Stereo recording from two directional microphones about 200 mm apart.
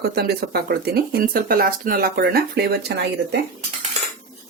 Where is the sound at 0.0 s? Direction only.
55° right (ahead or behind).